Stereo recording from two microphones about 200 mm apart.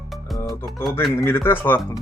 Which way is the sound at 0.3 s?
15° left (ahead or behind).